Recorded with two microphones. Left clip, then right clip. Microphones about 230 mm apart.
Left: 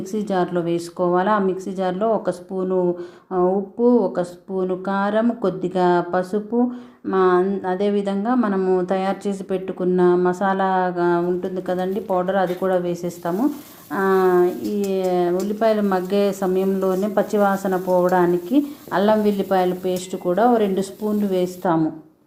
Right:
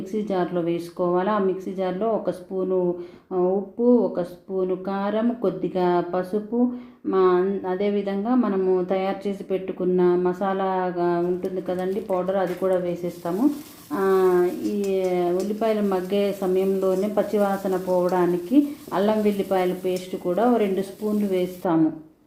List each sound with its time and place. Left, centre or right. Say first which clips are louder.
0.1 s speech: left 3 dB; left